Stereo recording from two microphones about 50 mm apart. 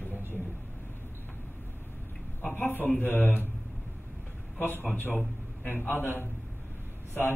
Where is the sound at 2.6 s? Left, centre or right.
Left.